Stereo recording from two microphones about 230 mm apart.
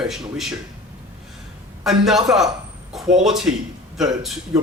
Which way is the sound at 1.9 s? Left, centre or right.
Centre.